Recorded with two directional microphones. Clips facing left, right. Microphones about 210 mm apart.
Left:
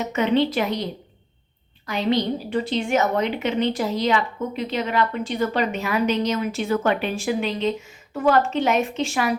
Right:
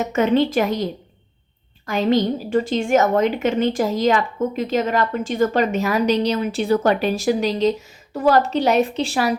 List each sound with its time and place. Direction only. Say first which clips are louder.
0.0 s a woman's voice: right 3 dB; 45° right (ahead or behind)
1.9 s a woman's voice: right 4 dB; 45° right (ahead or behind)